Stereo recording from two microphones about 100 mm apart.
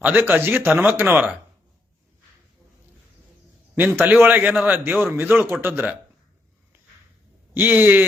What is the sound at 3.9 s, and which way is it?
Speech, 20° right (ahead or behind).